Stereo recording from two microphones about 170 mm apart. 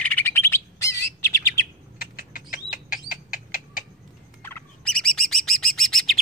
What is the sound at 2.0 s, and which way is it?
Frog, 55° left (ahead or behind).